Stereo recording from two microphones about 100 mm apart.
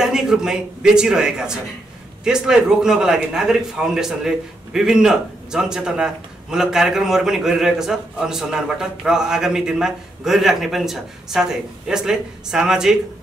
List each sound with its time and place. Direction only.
0.0 s a man's voice: 5° right (ahead or behind)